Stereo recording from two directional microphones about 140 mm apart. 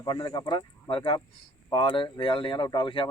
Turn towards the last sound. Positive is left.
turn(degrees=35)  # may be behind; listen again after turning